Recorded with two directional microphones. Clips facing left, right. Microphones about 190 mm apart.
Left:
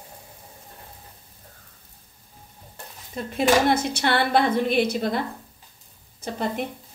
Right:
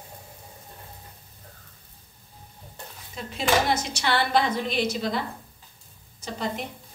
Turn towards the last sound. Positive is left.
turn(degrees=55)  # may be behind; listen again after turning